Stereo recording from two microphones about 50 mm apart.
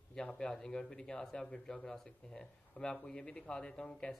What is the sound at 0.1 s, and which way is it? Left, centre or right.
A man's voice, centre.